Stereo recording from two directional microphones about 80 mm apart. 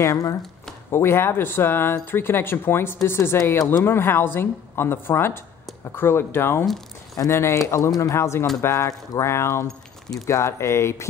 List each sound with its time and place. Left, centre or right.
0.0 s speech: left
0.9 s speech: left
9.7 s squish: centre
10.2 s speech: left